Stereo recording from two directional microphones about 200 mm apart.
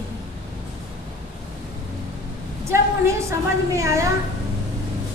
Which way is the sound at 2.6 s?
15° right (ahead or behind).